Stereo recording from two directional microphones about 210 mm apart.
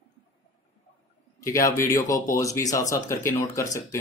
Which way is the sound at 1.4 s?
15° left (ahead or behind).